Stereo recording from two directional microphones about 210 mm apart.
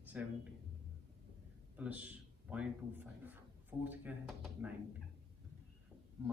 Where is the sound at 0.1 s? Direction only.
5° right (ahead or behind).